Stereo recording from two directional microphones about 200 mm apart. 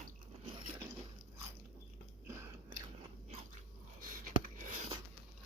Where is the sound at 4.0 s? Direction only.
45° right (ahead or behind).